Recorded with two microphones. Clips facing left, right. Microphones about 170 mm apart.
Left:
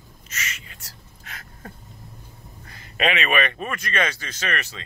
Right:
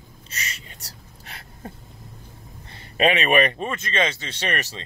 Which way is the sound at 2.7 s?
30° right (ahead or behind).